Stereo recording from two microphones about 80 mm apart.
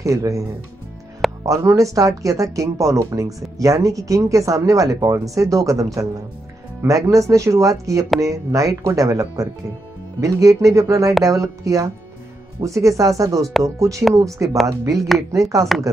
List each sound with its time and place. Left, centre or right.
0.0 s speech: right
1.4 s speech: right
7.1 s speech: right